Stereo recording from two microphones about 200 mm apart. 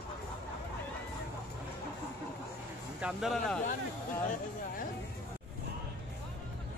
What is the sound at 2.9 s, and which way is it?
Speech, 5° right (ahead or behind).